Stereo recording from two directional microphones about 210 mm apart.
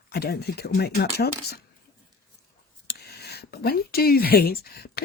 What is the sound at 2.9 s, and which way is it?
Speech, 50° left (ahead or behind).